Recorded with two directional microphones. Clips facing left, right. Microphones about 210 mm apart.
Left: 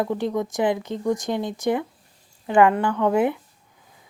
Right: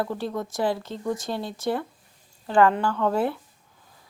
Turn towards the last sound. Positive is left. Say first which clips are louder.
# left 4 dB
turn(degrees=15)  # may be behind; listen again after turning